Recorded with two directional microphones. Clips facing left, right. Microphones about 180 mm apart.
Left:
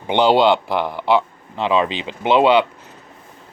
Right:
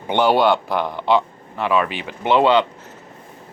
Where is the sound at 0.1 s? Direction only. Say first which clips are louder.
Left 2 dB; 15° left (ahead or behind).